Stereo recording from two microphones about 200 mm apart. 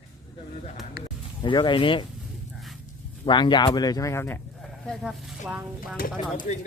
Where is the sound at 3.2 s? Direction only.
25° left (ahead or behind).